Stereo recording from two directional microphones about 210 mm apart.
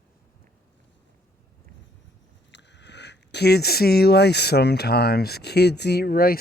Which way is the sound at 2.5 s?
55° left (ahead or behind).